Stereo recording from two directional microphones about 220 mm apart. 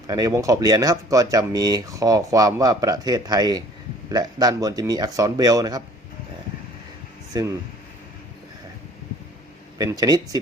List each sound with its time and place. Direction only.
0.1 s speech: 15° right (ahead or behind)
7.3 s speech: 15° right (ahead or behind)
9.7 s speech: 15° right (ahead or behind)